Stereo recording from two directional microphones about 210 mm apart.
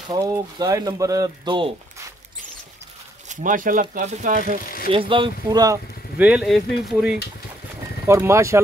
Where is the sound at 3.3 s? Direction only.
40° right (ahead or behind).